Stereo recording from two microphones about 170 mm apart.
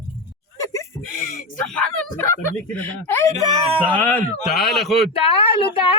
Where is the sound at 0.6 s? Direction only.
20° left (ahead or behind).